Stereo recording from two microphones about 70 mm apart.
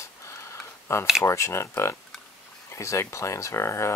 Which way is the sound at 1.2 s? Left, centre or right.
Left.